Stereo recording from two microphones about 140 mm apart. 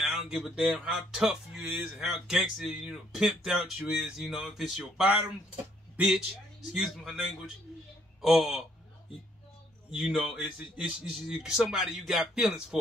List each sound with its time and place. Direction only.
0.0 s a man's voice: centre (ahead or behind)
9.8 s speech: 5° right (ahead or behind)